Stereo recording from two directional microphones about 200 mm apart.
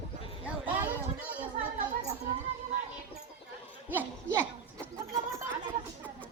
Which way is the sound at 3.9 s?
10° right (ahead or behind).